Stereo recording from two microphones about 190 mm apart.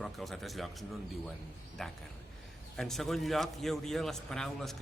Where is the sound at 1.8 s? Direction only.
5° left (ahead or behind).